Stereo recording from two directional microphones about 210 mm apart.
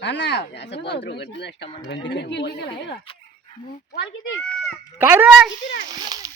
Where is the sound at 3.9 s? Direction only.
60° left (ahead or behind).